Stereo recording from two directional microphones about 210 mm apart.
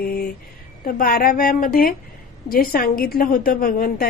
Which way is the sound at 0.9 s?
45° left (ahead or behind).